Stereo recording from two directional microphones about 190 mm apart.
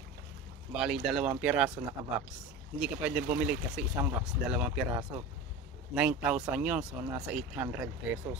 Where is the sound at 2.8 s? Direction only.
5° right (ahead or behind).